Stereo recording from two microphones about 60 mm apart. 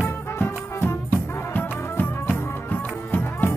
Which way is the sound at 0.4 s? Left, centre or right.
Left.